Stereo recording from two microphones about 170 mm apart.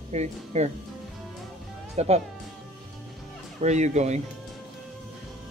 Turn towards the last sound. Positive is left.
turn(degrees=-40)  # may be behind; listen again after turning